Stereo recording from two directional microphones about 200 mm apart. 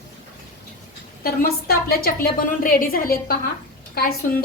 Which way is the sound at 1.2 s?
50° left (ahead or behind).